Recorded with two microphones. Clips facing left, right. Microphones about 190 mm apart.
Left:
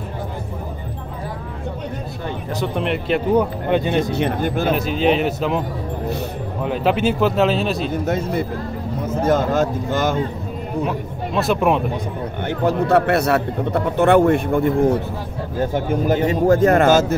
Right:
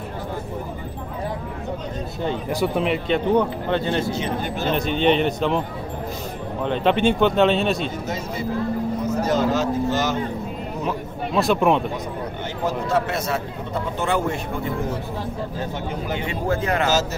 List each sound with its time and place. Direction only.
2.6 s a man's voice: centre (ahead or behind)
3.7 s speech: 15° left (ahead or behind)
4.1 s speech: 55° left (ahead or behind)
4.7 s a man's voice: 5° left (ahead or behind)
6.6 s a man's voice: 5° left (ahead or behind)
7.9 s speech: 60° left (ahead or behind)
10.9 s speech: centre (ahead or behind)
12.4 s speech: 60° left (ahead or behind)